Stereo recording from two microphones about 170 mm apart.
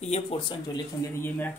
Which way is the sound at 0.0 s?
35° left (ahead or behind).